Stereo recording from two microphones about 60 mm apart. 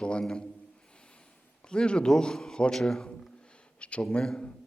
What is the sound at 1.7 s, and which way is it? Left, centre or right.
A man's voice, centre.